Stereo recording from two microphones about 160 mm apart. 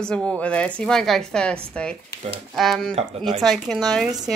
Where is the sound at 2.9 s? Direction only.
40° right (ahead or behind).